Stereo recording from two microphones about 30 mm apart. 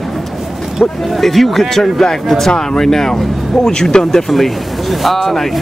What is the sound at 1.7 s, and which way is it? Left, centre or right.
Speech, centre.